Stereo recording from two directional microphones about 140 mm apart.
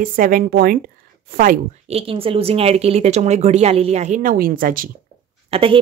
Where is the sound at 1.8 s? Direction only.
45° right (ahead or behind); by 4.9 s 85° right.